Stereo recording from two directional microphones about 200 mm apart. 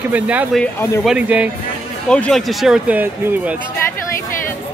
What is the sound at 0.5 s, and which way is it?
Speech, 10° left (ahead or behind).